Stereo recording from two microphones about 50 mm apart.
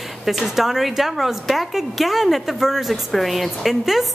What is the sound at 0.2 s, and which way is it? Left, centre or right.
A woman's voice, centre.